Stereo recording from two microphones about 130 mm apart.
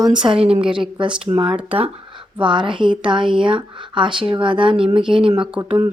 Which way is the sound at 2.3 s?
40° right (ahead or behind).